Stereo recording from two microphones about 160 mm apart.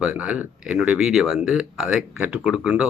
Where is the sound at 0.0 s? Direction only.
5° right (ahead or behind).